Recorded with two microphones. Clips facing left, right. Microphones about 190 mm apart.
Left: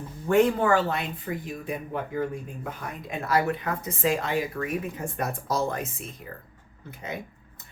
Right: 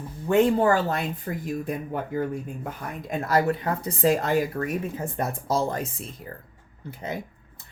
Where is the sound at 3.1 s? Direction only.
40° right (ahead or behind).